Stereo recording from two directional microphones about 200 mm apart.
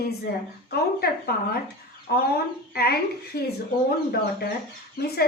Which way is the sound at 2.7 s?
50° left (ahead or behind).